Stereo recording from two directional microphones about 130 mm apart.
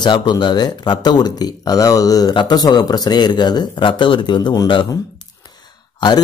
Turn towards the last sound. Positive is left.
turn(degrees=35)  # may be behind; listen again after turning